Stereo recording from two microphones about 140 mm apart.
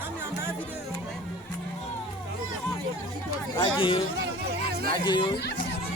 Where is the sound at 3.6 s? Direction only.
40° left (ahead or behind).